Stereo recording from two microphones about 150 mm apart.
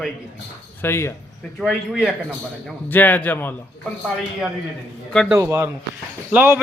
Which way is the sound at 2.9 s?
10° left (ahead or behind).